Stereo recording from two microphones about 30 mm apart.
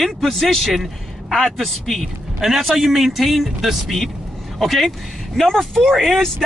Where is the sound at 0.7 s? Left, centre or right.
Centre.